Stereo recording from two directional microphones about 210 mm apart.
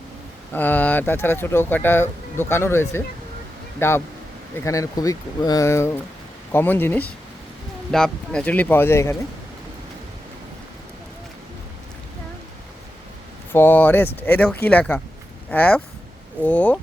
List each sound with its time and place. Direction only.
0.5 s speech: 10° left (ahead or behind)
13.5 s speech: 10° left (ahead or behind)